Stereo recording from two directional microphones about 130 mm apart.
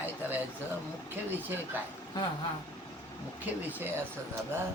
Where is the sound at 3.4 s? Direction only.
15° right (ahead or behind).